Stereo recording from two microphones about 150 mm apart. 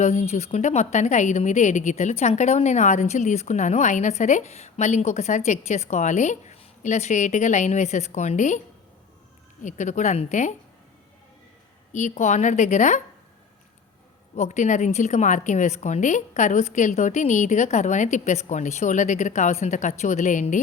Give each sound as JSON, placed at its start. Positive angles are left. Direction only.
{"t": 0.0, "sound": "a woman's voice", "side_deg": 50}
{"t": 9.6, "sound": "a woman's voice", "side_deg": 55}
{"t": 11.9, "sound": "a woman's voice", "side_deg": 50}
{"t": 14.3, "sound": "a woman's voice", "side_deg": 50}